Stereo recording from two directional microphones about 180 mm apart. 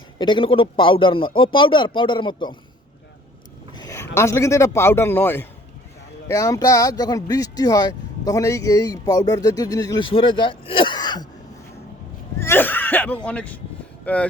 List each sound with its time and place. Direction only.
0.2 s speech: 25° left (ahead or behind)
3.8 s a man's voice: 20° left (ahead or behind)
12.4 s a sound: 10° left (ahead or behind)
13.2 s speech: 5° left (ahead or behind)